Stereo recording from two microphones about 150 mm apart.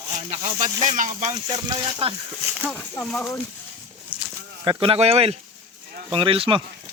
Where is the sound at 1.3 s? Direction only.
25° right (ahead or behind).